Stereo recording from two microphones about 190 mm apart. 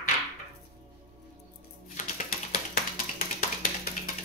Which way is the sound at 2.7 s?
50° left (ahead or behind).